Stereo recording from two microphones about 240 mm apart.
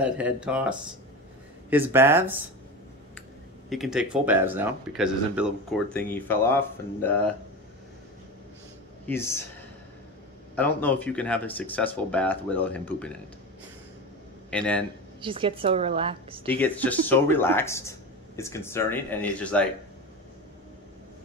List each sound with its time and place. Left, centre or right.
0.0 s speech: centre
3.7 s speech: centre
9.0 s speech: centre
10.5 s speech: centre
14.5 s speech: centre
15.2 s a woman's voice: right
16.4 s speech: centre